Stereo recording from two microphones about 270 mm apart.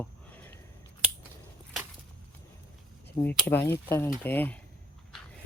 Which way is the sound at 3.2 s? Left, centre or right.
Centre.